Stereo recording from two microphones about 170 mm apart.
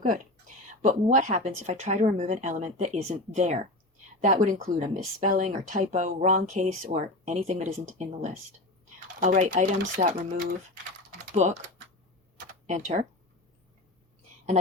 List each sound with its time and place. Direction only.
0.0 s speech: 50° right (ahead or behind)
12.6 s speech: 45° right (ahead or behind)